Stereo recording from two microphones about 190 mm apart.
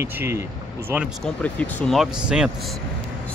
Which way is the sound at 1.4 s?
5° left (ahead or behind).